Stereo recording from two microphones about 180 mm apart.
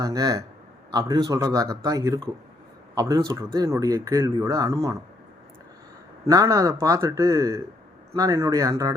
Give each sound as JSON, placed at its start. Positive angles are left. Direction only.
{"t": 0.0, "sound": "speech", "side_deg": -20}
{"t": 6.2, "sound": "speech", "side_deg": -15}